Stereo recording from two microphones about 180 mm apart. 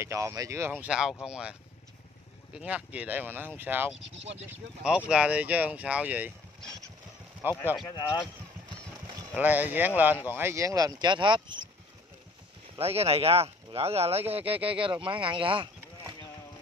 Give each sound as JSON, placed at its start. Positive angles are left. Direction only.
{"t": 0.0, "sound": "speech", "side_deg": -15}
{"t": 4.2, "sound": "speech", "side_deg": -35}
{"t": 4.5, "sound": "speech", "side_deg": -5}
{"t": 7.4, "sound": "speech", "side_deg": -10}
{"t": 9.3, "sound": "speech", "side_deg": -10}
{"t": 12.7, "sound": "speech", "side_deg": -35}